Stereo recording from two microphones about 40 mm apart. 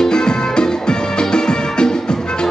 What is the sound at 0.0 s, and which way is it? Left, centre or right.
Music, centre.